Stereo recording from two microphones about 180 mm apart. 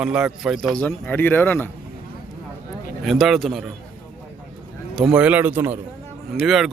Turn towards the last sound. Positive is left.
turn(degrees=0)  # may be behind; listen again after turning